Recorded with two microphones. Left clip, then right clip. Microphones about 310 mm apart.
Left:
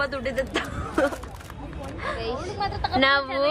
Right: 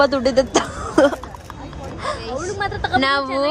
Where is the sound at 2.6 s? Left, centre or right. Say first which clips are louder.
Right 5 dB; right.